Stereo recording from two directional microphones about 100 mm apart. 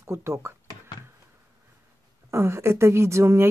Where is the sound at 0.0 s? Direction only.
30° right (ahead or behind).